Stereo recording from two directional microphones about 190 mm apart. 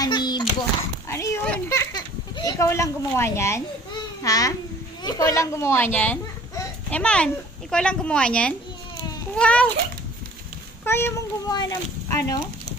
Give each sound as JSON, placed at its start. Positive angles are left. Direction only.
{"t": 0.0, "sound": "a sound", "side_deg": 20}
{"t": 4.2, "sound": "a child's voice", "side_deg": 20}
{"t": 10.8, "sound": "a child's voice", "side_deg": 10}